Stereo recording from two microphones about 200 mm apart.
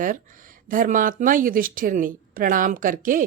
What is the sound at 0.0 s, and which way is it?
Speech, 40° right (ahead or behind).